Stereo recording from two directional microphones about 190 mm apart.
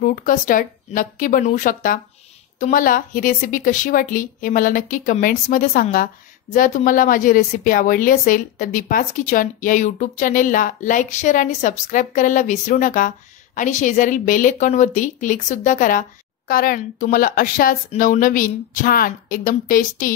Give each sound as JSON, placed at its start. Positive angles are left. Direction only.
{"t": 0.0, "sound": "a woman's voice", "side_deg": 45}